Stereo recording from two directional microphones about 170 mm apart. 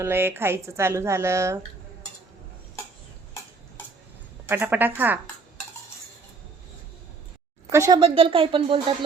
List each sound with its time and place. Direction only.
0.0 s a woman's voice: 15° right (ahead or behind)
4.4 s a woman's voice: 10° right (ahead or behind)
7.7 s a woman's voice: 15° right (ahead or behind)
7.9 s speech: 30° right (ahead or behind)